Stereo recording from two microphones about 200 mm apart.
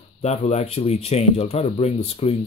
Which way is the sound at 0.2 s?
35° left (ahead or behind).